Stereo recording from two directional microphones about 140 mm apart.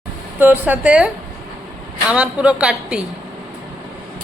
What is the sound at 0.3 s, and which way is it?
A man's voice, 15° right (ahead or behind).